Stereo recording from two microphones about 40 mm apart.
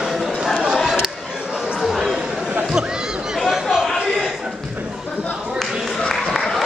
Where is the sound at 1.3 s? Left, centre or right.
Centre.